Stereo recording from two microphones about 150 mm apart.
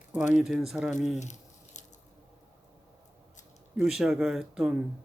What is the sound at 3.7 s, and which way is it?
Speech, 5° right (ahead or behind).